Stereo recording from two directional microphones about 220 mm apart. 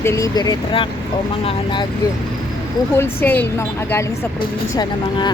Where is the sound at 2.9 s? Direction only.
10° left (ahead or behind).